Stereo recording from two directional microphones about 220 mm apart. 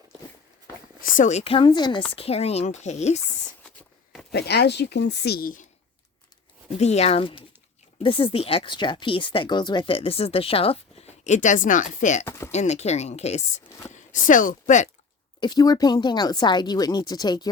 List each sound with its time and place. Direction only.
1.1 s speech: 35° left (ahead or behind)
4.3 s speech: 50° left (ahead or behind)
6.7 s speech: 30° left (ahead or behind)
12.2 s a sound: 10° left (ahead or behind)
12.5 s speech: 30° left (ahead or behind)
15.4 s speech: 20° left (ahead or behind)